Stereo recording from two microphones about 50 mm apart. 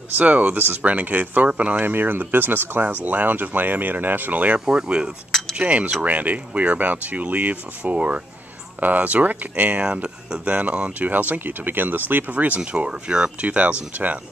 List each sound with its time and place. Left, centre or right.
0.2 s speech: right
1.8 s speech: right
4.6 s speech: centre